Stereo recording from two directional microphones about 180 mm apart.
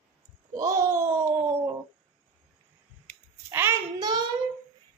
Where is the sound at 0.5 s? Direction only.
20° right (ahead or behind).